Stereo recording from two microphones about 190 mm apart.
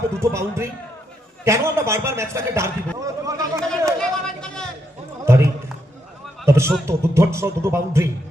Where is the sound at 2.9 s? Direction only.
15° right (ahead or behind).